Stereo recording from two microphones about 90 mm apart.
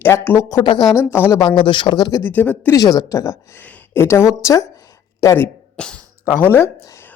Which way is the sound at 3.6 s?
15° left (ahead or behind).